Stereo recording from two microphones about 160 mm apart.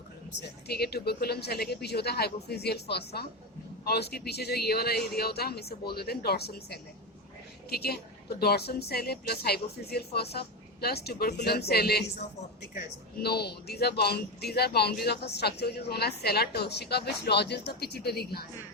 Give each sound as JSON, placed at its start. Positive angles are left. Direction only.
{"t": 0.3, "sound": "a woman's voice", "side_deg": 85}
{"t": 12.7, "sound": "speech", "side_deg": 75}